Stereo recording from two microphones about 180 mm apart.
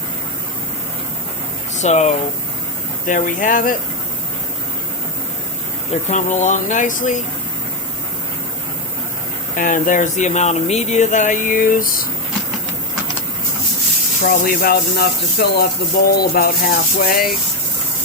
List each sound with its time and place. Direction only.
1.8 s speech: 40° left (ahead or behind)
5.9 s speech: 40° left (ahead or behind)
9.6 s speech: 50° left (ahead or behind)
14.3 s speech: 55° left (ahead or behind)